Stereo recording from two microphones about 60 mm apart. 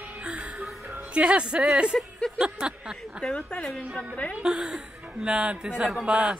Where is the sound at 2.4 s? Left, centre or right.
Centre.